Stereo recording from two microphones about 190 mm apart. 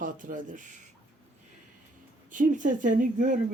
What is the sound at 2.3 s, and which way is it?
Speech, 45° right (ahead or behind).